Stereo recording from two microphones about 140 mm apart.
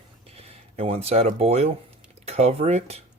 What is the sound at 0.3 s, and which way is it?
Speech, 45° right (ahead or behind).